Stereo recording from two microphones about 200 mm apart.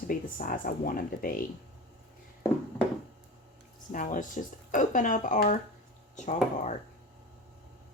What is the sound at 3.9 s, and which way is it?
Speech, 40° left (ahead or behind).